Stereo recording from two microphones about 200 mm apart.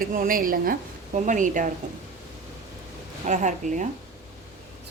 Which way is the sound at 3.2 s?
35° right (ahead or behind).